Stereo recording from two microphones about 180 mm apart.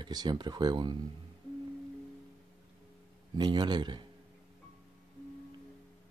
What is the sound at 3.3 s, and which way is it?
Speech, 25° right (ahead or behind).